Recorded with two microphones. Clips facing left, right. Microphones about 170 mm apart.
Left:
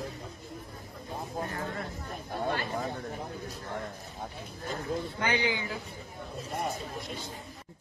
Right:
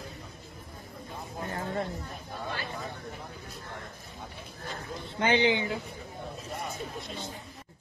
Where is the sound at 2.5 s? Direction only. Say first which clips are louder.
Left 5 dB; 50° left (ahead or behind).